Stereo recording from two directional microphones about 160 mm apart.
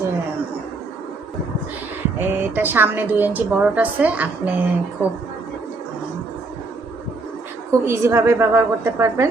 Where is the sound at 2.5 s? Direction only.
10° right (ahead or behind).